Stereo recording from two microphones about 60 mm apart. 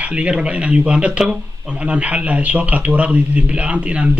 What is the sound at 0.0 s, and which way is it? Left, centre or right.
Speech, centre.